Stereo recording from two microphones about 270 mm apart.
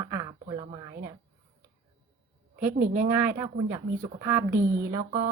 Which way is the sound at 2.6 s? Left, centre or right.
Right.